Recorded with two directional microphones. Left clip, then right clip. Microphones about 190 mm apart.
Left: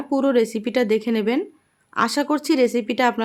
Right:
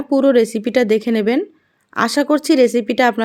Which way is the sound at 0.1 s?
15° right (ahead or behind).